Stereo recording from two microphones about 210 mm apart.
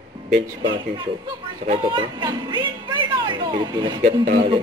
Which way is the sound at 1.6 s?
20° right (ahead or behind).